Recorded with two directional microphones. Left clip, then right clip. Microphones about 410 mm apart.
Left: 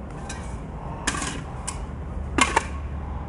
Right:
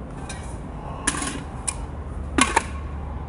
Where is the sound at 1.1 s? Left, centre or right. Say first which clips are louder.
Right 1 dB; centre.